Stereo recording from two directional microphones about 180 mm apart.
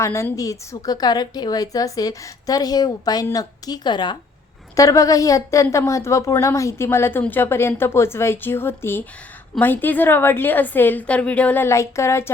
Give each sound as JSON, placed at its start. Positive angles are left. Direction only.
{"t": 0.0, "sound": "a woman's voice", "side_deg": 15}